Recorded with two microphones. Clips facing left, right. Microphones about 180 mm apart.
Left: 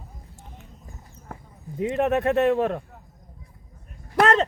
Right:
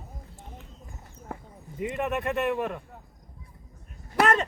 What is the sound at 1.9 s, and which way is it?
Speech, 60° left (ahead or behind).